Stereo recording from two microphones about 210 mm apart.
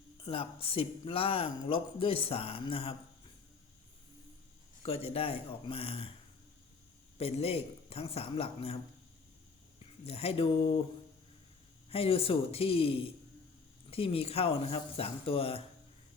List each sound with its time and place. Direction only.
0.3 s speech: 25° left (ahead or behind)
4.8 s speech: 25° left (ahead or behind)
7.2 s speech: 30° left (ahead or behind)
9.8 s speech: 30° left (ahead or behind)
11.9 s speech: 25° left (ahead or behind)